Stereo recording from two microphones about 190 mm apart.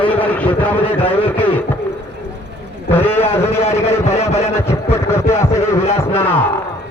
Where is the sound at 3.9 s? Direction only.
35° left (ahead or behind).